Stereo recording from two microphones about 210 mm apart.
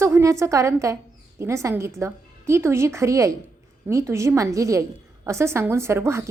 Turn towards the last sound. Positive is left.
turn(degrees=-15)  # may be behind; listen again after turning